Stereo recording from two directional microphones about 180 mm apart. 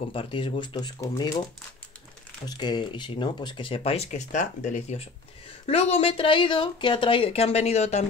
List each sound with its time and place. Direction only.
0.1 s speech: 30° left (ahead or behind)
2.4 s speech: 25° left (ahead or behind)